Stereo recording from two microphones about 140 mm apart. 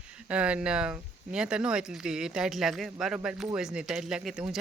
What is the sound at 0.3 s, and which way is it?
Speech, 10° right (ahead or behind).